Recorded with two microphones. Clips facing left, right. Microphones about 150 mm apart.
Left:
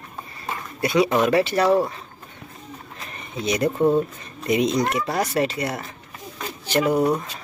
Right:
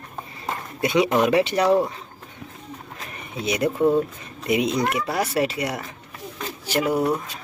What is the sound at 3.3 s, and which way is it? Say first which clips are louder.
Speech: left 1 dB; 10° right (ahead or behind).